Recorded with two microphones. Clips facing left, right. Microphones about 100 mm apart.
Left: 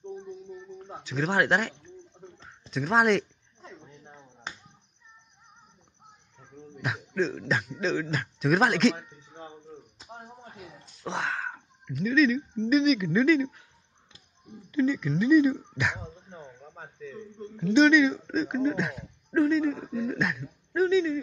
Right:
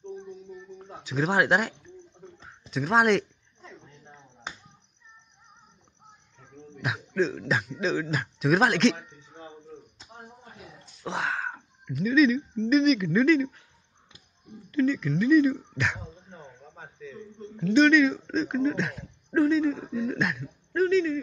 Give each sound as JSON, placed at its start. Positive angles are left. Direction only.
{"t": 1.0, "sound": "speech", "side_deg": -15}
{"t": 3.6, "sound": "snake", "side_deg": 10}
{"t": 6.8, "sound": "speech", "side_deg": 0}
{"t": 11.1, "sound": "a sound", "side_deg": -5}
{"t": 12.6, "sound": "speech", "side_deg": 5}
{"t": 14.7, "sound": "speech", "side_deg": 15}
{"t": 17.6, "sound": "speech", "side_deg": 20}
{"t": 18.0, "sound": "speech", "side_deg": 5}
{"t": 20.7, "sound": "speech", "side_deg": 15}